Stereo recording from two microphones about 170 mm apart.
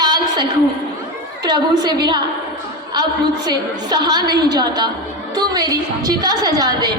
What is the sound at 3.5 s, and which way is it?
A woman's voice, 25° right (ahead or behind).